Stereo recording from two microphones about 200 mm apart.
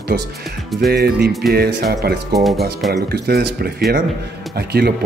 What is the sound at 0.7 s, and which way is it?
Speech, 55° right (ahead or behind).